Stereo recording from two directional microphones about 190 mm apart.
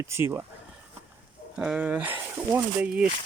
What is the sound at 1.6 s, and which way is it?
Speech, 5° right (ahead or behind).